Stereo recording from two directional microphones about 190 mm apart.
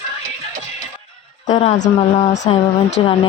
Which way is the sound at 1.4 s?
35° left (ahead or behind).